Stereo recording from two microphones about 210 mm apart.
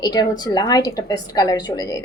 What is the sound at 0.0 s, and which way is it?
A woman's voice, 20° left (ahead or behind).